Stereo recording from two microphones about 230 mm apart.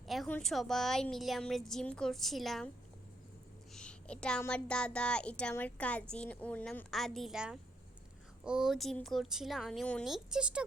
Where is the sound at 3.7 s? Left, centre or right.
Centre.